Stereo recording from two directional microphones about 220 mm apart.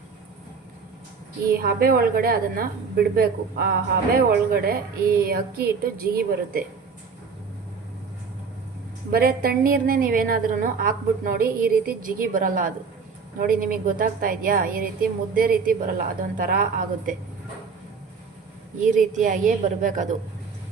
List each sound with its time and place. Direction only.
1.5 s a woman's voice: 45° right (ahead or behind)
9.1 s a woman's voice: 45° right (ahead or behind)
18.9 s a woman's voice: 35° right (ahead or behind)